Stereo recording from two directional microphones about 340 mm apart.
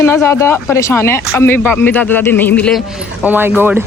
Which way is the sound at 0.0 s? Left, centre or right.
Centre.